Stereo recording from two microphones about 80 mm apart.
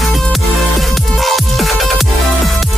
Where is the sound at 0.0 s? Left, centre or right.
Centre.